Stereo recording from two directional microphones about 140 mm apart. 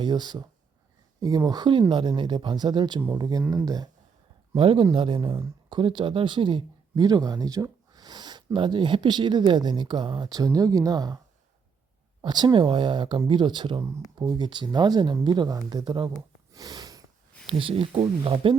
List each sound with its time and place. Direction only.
0.0 s speech: 30° right (ahead or behind)
4.5 s speech: 40° right (ahead or behind)
12.2 s speech: 30° right (ahead or behind)
16.5 s snort: 25° right (ahead or behind)
17.4 s speech: 40° right (ahead or behind)